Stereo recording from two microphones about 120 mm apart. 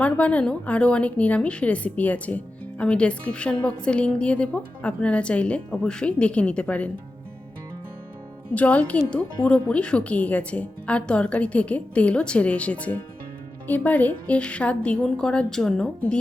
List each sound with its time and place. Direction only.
0.0 s a woman's voice: 10° left (ahead or behind)
8.5 s a woman's voice: 10° left (ahead or behind)